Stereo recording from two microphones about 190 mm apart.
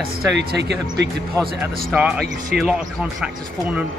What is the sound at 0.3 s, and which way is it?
Speech, 65° right (ahead or behind).